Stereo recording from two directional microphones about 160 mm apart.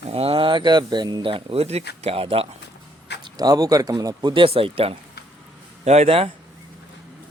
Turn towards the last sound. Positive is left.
turn(degrees=-35)  # may be behind; listen again after turning